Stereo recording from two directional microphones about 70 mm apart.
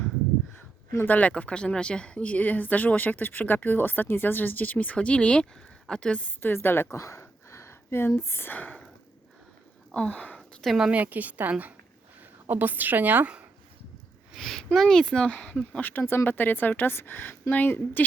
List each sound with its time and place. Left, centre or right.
0.5 s a sound: left
1.1 s speech: centre
6.4 s a woman's voice: left
7.0 s a sound: left
8.5 s speech: left
9.9 s speech: centre
10.7 s a woman's voice: centre
10.9 s a woman's voice: right
14.3 s speech: centre
15.8 s speech: left